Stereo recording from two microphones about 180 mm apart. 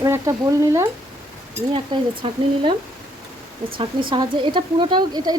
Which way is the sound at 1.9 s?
25° right (ahead or behind).